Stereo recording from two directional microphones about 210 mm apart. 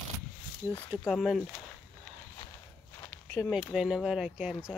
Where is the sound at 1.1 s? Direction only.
Centre (ahead or behind).